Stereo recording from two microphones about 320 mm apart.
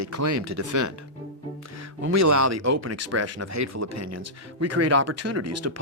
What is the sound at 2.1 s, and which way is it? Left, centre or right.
Speech, right.